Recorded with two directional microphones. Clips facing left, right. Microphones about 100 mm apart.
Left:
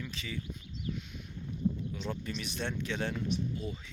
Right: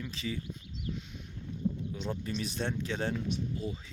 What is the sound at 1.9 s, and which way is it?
Speech, 25° right (ahead or behind).